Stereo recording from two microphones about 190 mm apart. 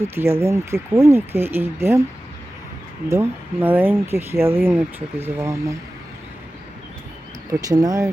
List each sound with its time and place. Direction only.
0.0 s speech: 10° right (ahead or behind)
3.1 s speech: 10° right (ahead or behind)
7.5 s speech: 20° right (ahead or behind)